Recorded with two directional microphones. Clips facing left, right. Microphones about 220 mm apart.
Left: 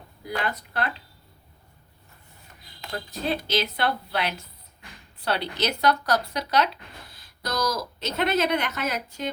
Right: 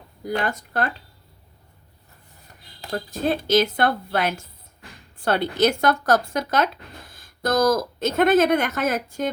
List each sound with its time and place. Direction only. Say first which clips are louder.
0.3 s speech: right 4 dB; 45° right (ahead or behind)
2.8 s speech: right 6 dB; 45° right (ahead or behind)